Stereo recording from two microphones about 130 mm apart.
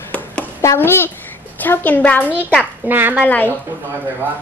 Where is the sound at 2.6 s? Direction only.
15° right (ahead or behind).